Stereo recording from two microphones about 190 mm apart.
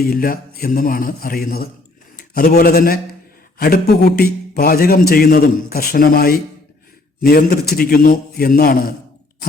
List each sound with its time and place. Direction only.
0.0 s a man's voice: 50° left (ahead or behind)